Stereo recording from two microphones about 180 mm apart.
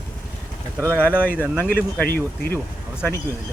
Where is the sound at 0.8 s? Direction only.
10° right (ahead or behind).